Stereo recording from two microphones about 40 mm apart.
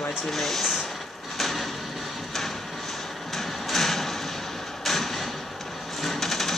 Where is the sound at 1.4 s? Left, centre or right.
Centre.